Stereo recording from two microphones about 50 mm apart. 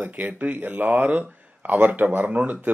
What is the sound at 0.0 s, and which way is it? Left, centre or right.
Speech, right.